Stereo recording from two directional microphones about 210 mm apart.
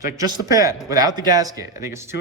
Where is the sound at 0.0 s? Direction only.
20° right (ahead or behind).